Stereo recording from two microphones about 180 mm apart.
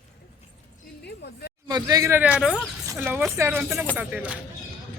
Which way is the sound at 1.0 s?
65° left (ahead or behind).